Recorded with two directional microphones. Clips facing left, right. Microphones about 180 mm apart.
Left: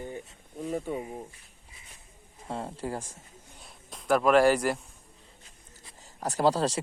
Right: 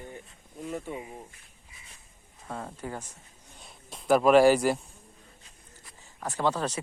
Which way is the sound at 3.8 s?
25° right (ahead or behind).